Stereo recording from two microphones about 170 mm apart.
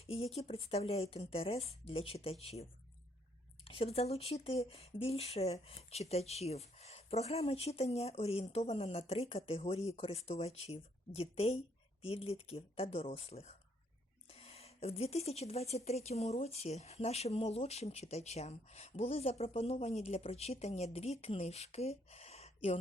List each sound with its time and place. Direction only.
0.0 s speech: 35° left (ahead or behind)